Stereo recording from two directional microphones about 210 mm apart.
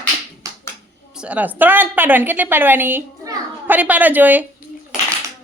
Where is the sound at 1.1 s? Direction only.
5° right (ahead or behind).